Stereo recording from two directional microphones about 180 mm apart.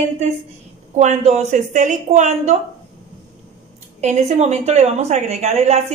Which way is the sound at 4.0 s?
40° right (ahead or behind).